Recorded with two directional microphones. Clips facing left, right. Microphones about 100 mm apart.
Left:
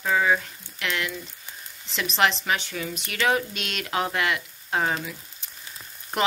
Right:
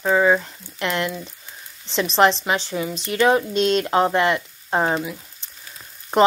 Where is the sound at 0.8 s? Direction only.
35° right (ahead or behind).